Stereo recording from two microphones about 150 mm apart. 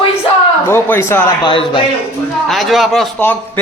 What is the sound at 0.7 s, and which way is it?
Speech, 15° left (ahead or behind).